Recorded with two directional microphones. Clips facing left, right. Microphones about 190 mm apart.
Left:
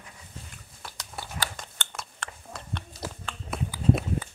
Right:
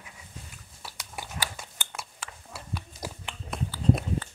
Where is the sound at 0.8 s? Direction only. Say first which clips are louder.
Left 1 dB; 10° right (ahead or behind).